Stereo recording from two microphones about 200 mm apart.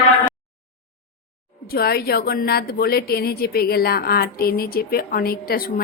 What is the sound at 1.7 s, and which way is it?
Speech, 50° left (ahead or behind).